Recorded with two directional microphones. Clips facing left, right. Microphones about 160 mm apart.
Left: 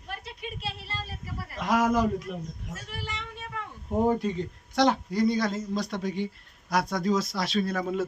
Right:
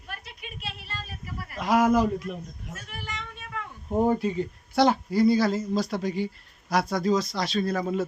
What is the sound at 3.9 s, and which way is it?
Speech, 5° right (ahead or behind).